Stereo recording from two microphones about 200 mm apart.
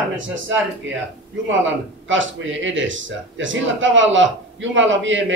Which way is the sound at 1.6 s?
70° right (ahead or behind).